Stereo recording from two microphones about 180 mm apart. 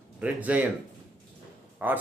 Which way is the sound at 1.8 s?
10° right (ahead or behind).